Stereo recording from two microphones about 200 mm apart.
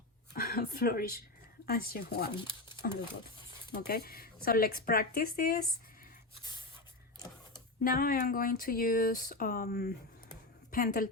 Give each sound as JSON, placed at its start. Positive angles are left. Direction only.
{"t": 0.3, "sound": "speech", "side_deg": 50}
{"t": 3.7, "sound": "speech", "side_deg": 50}
{"t": 7.8, "sound": "a woman's voice", "side_deg": 45}